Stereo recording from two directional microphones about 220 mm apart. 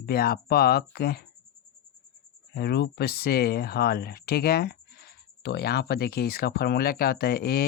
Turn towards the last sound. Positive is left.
turn(degrees=45)  # may be behind; listen again after turning